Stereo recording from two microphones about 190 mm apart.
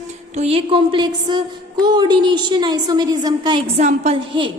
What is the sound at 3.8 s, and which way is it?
Speech, 40° right (ahead or behind).